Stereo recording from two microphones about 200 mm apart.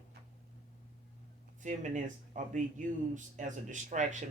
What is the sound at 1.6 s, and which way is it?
Speech, 40° right (ahead or behind).